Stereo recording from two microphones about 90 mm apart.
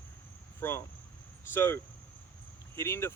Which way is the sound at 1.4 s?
30° left (ahead or behind).